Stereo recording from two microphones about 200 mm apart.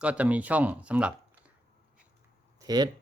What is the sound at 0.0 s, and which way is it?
Speech, 5° right (ahead or behind).